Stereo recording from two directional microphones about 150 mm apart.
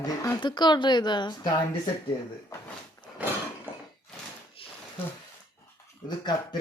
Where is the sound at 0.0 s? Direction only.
25° left (ahead or behind).